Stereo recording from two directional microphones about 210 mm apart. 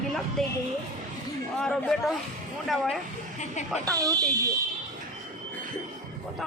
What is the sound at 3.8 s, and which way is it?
Speech, 15° right (ahead or behind).